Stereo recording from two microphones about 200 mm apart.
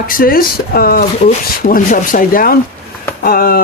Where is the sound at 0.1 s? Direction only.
45° left (ahead or behind).